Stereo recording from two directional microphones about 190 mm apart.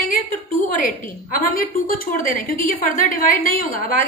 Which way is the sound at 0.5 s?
45° left (ahead or behind).